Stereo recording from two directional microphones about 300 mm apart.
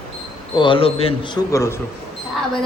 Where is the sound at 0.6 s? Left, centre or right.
Centre.